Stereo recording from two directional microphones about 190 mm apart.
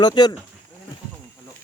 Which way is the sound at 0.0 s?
20° left (ahead or behind).